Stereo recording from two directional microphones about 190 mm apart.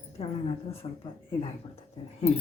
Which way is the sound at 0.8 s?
30° left (ahead or behind).